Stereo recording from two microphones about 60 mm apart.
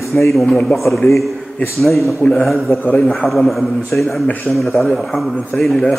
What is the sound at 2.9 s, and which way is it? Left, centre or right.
Speech, left.